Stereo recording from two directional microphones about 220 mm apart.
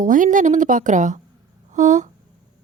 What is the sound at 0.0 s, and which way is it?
A woman's voice, 35° right (ahead or behind).